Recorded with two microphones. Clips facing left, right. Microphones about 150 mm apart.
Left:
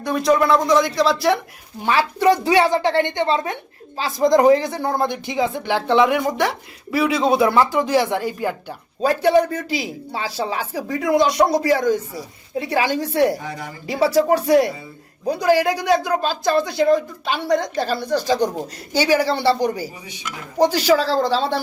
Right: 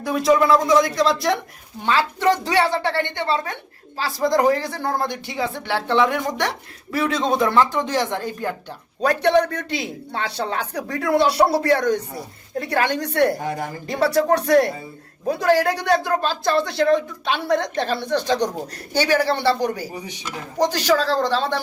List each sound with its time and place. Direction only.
0.0 s a woman's voice: centre (ahead or behind)
13.4 s speech: 45° right (ahead or behind)
13.8 s speech: 5° left (ahead or behind)
20.1 s speech: 40° right (ahead or behind)
20.6 s a woman's voice: 10° left (ahead or behind)